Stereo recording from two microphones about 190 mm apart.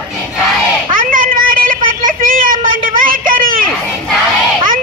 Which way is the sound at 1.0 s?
45° right (ahead or behind).